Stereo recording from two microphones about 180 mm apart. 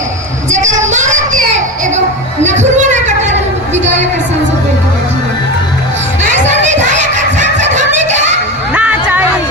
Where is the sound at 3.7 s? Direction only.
40° right (ahead or behind).